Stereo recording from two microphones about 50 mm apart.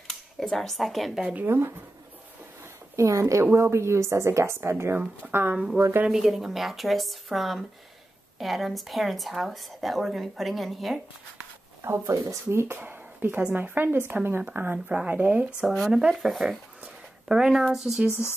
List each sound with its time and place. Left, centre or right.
0.1 s speech: centre
1.4 s a woman's voice: right
3.0 s speech: right
3.5 s a woman's voice: right
5.2 s speech: right
6.0 s speech: centre
11.8 s a woman's voice: right
12.7 s a sound: right
13.6 s a woman's voice: right
14.9 s speech: right
15.6 s speech: centre
16.8 s speech: centre